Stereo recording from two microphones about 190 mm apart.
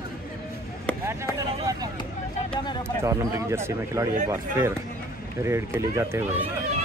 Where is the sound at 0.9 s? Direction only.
5° left (ahead or behind).